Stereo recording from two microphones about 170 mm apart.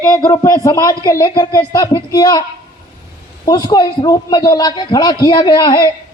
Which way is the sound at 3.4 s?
25° left (ahead or behind).